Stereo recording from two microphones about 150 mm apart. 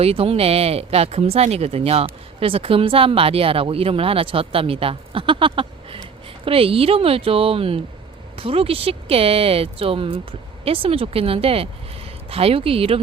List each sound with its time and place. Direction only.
0.0 s speech: 40° right (ahead or behind)